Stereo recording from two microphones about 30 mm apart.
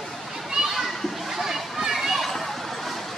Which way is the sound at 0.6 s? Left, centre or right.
Right.